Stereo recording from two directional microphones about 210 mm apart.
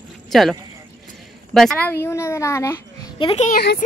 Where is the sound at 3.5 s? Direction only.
45° left (ahead or behind).